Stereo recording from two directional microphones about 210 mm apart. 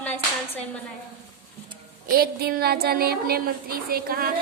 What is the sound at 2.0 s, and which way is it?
A woman's voice, 45° right (ahead or behind).